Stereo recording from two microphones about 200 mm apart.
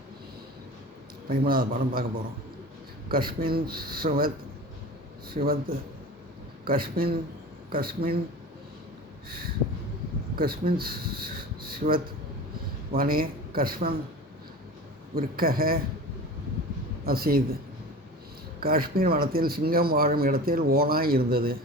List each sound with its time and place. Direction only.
1.3 s speech: 45° right (ahead or behind)
3.1 s speech: 45° right (ahead or behind)
5.3 s speech: 45° right (ahead or behind)
10.3 s speech: 50° right (ahead or behind)
15.1 s speech: 45° right (ahead or behind)
17.1 s speech: 50° right (ahead or behind)
18.6 s speech: 45° right (ahead or behind)